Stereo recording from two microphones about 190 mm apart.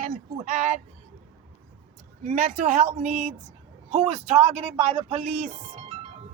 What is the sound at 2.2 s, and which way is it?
Speech, 40° right (ahead or behind).